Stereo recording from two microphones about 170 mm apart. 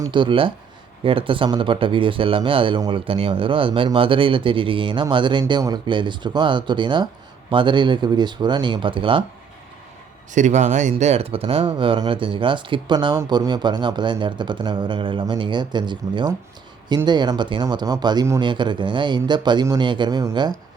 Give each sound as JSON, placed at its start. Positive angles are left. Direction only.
{"t": 0.0, "sound": "speech", "side_deg": -30}
{"t": 10.3, "sound": "speech", "side_deg": -45}